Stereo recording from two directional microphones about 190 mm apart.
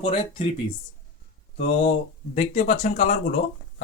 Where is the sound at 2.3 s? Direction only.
40° left (ahead or behind).